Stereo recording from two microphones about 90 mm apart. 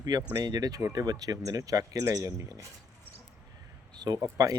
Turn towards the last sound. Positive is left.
turn(degrees=-40)  # may be behind; listen again after turning